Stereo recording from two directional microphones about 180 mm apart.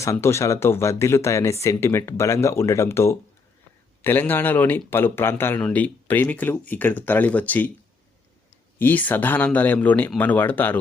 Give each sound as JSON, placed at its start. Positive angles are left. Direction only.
{"t": 0.0, "sound": "speech", "side_deg": 15}
{"t": 8.8, "sound": "speech", "side_deg": 10}